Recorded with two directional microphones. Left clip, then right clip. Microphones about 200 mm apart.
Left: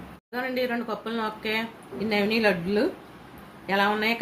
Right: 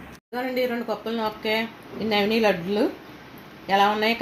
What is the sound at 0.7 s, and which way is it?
A woman's voice, 35° right (ahead or behind).